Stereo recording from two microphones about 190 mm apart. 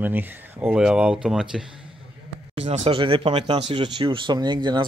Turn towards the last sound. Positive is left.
turn(degrees=-25)  # may be behind; listen again after turning